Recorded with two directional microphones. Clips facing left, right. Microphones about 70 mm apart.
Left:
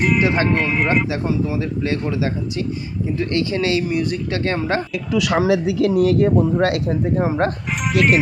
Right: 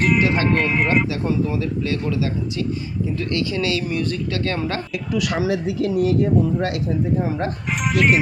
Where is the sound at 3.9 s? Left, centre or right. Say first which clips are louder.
Left 2 dB; centre.